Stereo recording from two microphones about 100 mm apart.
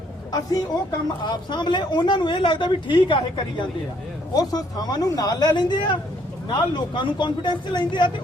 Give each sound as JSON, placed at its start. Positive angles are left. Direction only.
{"t": 0.3, "sound": "speech", "side_deg": 40}
{"t": 4.4, "sound": "speech", "side_deg": 40}